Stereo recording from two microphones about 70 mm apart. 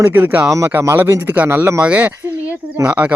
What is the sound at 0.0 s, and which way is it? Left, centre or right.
Speech, right.